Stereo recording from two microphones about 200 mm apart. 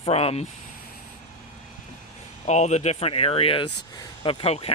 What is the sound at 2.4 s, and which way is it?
Speech, 35° left (ahead or behind).